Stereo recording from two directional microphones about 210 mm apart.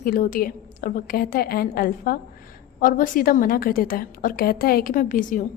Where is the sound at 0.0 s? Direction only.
40° left (ahead or behind).